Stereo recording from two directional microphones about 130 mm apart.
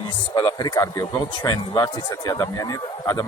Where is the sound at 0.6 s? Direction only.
30° left (ahead or behind).